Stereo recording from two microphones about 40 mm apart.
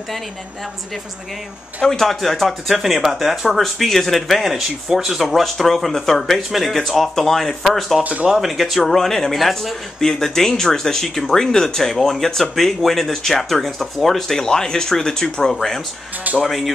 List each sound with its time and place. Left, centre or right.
1.8 s speech: centre
8.0 s speech: right
8.3 s speech: centre
16.4 s speech: centre